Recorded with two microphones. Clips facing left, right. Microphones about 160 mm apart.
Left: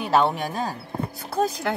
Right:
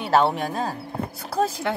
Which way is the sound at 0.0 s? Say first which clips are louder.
Right 1 dB; centre (ahead or behind).